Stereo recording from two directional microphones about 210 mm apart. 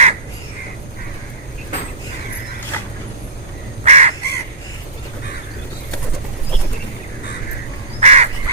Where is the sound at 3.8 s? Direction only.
30° right (ahead or behind).